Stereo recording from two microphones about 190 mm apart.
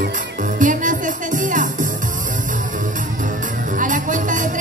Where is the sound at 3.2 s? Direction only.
45° right (ahead or behind).